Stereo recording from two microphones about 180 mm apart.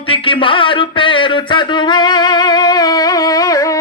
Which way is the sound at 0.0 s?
30° left (ahead or behind).